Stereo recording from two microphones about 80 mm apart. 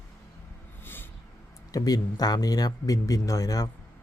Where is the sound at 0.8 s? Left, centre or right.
Left.